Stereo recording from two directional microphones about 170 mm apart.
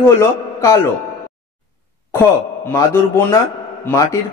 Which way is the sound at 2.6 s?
15° left (ahead or behind).